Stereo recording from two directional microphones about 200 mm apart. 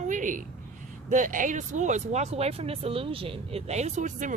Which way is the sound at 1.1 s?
40° right (ahead or behind).